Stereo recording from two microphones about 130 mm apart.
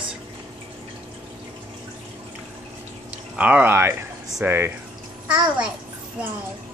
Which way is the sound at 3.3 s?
10° right (ahead or behind).